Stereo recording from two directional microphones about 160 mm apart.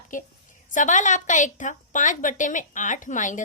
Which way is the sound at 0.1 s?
55° left (ahead or behind).